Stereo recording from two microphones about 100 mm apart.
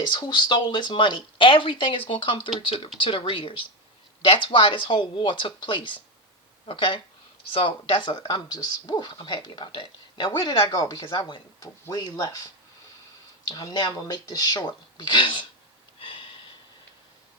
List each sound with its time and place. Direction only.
0.0 s speech: 50° left (ahead or behind)
9.1 s speech: 55° left (ahead or behind)
10.7 s speech: 35° left (ahead or behind)
13.5 s speech: 45° left (ahead or behind)
16.0 s sniff: 55° left (ahead or behind)